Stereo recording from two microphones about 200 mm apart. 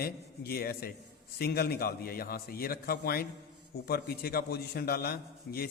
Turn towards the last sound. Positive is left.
turn(degrees=50)  # may be behind; listen again after turning